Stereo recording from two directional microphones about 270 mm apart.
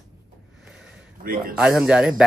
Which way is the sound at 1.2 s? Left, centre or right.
Right.